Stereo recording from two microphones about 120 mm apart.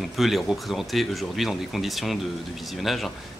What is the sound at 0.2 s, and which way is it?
Speech, centre (ahead or behind).